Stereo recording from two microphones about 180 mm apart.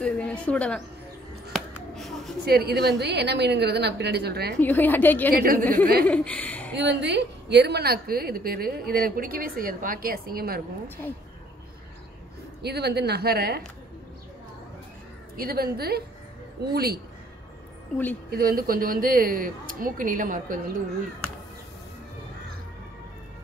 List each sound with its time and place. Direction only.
0.0 s a woman's voice: 5° left (ahead or behind)
1.5 s a sound: centre (ahead or behind)
2.4 s a woman's voice: 60° right (ahead or behind)
4.6 s a woman's voice: 10° left (ahead or behind)
6.7 s a woman's voice: 75° right (ahead or behind); by 10.6 s 55° right (ahead or behind)
12.6 s a woman's voice: 65° right (ahead or behind)
15.3 s a woman's voice: 55° right (ahead or behind)
18.3 s speech: 55° right (ahead or behind)